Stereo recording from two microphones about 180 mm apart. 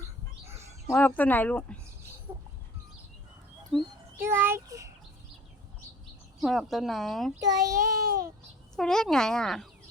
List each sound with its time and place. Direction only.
0.4 s bird: 15° right (ahead or behind)
0.9 s speech: 10° left (ahead or behind)
2.3 s a sound: 10° right (ahead or behind)
3.7 s speech: centre (ahead or behind)
4.2 s a child's voice: 10° right (ahead or behind)
6.4 s speech: centre (ahead or behind)
7.4 s child singing: 20° right (ahead or behind)
8.7 s speech: 5° left (ahead or behind)